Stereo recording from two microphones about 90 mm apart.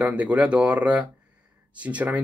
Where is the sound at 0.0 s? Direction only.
15° right (ahead or behind).